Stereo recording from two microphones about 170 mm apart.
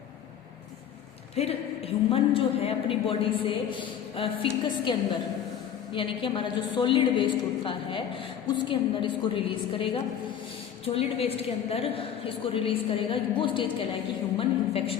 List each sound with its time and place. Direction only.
1.4 s a woman's voice: 35° left (ahead or behind)